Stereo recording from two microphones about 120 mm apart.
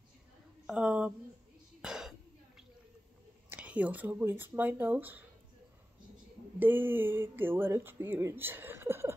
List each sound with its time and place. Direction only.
0.7 s a sound: 10° right (ahead or behind)
1.8 s throat clearing: 5° right (ahead or behind)
3.4 s speech: 10° right (ahead or behind)
6.6 s speech: 15° right (ahead or behind)